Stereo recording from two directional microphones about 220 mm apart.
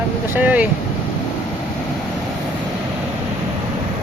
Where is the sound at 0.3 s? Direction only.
5° right (ahead or behind).